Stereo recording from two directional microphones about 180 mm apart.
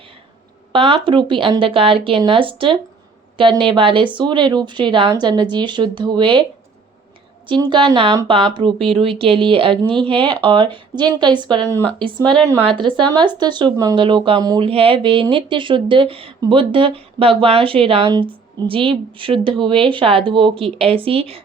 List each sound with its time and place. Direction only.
0.7 s speech: 30° right (ahead or behind)
7.4 s speech: 25° right (ahead or behind)
12.6 s speech: 25° right (ahead or behind)